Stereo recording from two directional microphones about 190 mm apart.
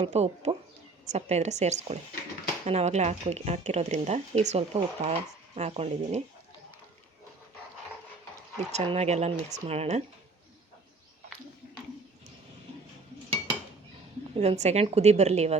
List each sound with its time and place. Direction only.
0.0 s speech: 35° right (ahead or behind)
8.5 s speech: 30° right (ahead or behind)
14.3 s speech: 35° right (ahead or behind)